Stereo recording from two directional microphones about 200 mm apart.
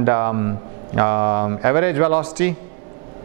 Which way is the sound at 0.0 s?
15° right (ahead or behind).